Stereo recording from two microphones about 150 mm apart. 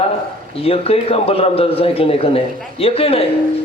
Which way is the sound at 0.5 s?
40° left (ahead or behind).